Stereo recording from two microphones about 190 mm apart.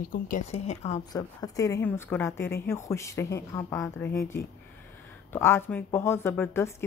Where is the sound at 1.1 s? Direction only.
20° left (ahead or behind).